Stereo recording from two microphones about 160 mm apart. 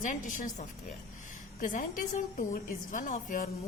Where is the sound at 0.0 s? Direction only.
50° left (ahead or behind).